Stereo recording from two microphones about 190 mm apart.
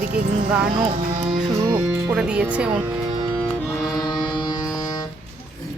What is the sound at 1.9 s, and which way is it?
Speech, 5° right (ahead or behind).